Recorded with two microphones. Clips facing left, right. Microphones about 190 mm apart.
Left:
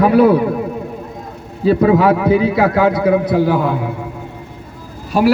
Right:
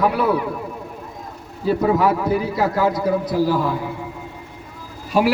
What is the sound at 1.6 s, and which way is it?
A man's voice, 70° left (ahead or behind).